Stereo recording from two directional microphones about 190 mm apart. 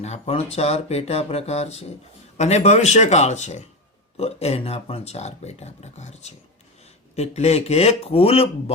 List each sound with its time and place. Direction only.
0.0 s speech: 35° left (ahead or behind)